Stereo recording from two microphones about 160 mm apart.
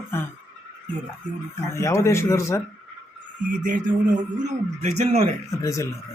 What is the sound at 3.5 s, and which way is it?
Speech, 55° right (ahead or behind).